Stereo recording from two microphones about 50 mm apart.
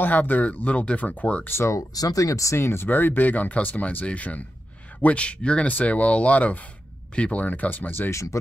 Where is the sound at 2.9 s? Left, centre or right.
Left.